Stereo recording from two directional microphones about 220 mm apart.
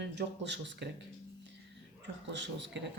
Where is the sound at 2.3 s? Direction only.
55° right (ahead or behind).